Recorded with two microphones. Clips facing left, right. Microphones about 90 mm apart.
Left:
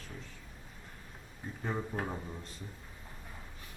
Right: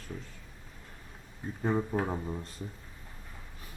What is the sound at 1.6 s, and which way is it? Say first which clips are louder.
Speech: right 7 dB; 30° right (ahead or behind).